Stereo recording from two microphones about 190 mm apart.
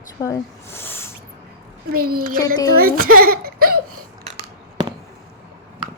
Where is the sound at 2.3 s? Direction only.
20° left (ahead or behind).